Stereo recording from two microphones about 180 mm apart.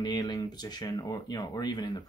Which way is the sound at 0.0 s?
20° left (ahead or behind).